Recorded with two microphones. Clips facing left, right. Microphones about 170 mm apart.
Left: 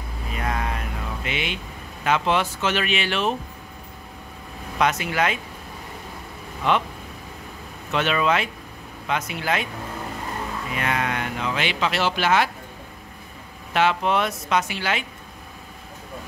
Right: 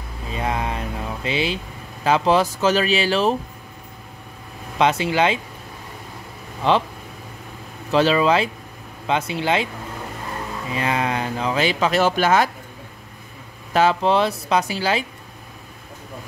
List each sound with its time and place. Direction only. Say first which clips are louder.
0.3 s vehicle: right 3 dB; 25° right (ahead or behind)
2.0 s speech: right 4 dB; 35° right (ahead or behind)
4.7 s speech: right 4 dB; 30° right (ahead or behind)
6.6 s speech: right 3 dB; 30° right (ahead or behind)
7.9 s speech: right 5 dB; 30° right (ahead or behind)
10.7 s speech: right 4 dB; 30° right (ahead or behind)
13.7 s speech: right 4 dB; 35° right (ahead or behind)